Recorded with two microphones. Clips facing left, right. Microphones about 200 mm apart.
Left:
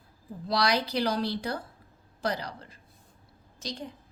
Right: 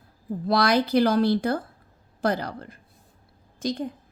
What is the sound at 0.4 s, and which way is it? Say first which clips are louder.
A woman's voice: right 6 dB; 55° right (ahead or behind).